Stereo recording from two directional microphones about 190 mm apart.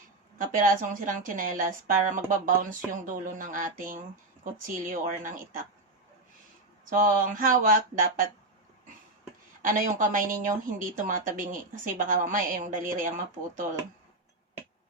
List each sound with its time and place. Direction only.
0.3 s speech: 45° right (ahead or behind)
6.9 s speech: 45° right (ahead or behind)
9.6 s speech: 45° right (ahead or behind)